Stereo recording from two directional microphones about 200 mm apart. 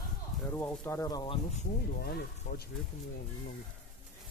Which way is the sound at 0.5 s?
10° left (ahead or behind).